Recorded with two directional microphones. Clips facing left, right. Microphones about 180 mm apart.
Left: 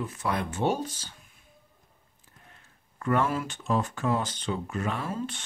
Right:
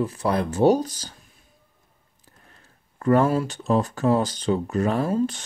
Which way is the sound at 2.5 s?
35° right (ahead or behind).